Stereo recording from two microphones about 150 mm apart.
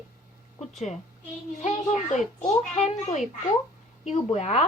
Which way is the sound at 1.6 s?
50° left (ahead or behind).